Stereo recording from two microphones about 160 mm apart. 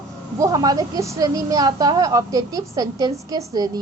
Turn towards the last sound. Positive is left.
turn(degrees=-25)  # may be behind; listen again after turning